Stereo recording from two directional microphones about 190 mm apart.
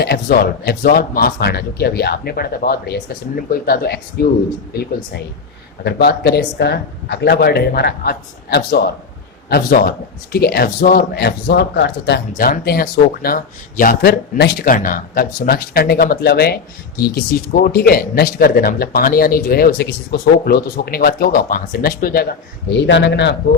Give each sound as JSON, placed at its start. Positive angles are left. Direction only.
{"t": 0.0, "sound": "speech", "side_deg": 55}
{"t": 12.4, "sound": "speech", "side_deg": 50}
{"t": 22.7, "sound": "speech", "side_deg": 65}